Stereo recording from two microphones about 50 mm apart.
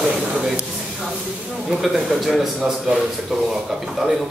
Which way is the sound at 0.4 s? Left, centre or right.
Centre.